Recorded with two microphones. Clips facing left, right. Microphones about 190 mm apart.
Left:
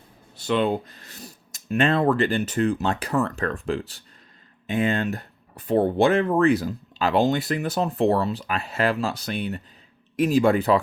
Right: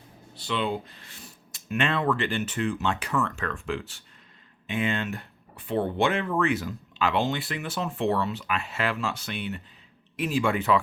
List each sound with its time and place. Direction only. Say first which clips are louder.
0.3 s speech: left 6 dB; 45° left (ahead or behind)